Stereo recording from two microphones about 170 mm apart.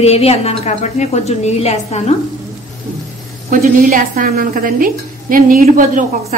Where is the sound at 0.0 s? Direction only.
35° left (ahead or behind).